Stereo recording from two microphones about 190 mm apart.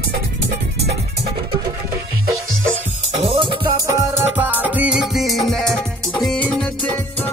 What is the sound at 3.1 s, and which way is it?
Music, 30° right (ahead or behind).